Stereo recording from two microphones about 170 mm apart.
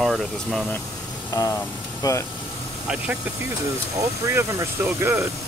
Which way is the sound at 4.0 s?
15° right (ahead or behind).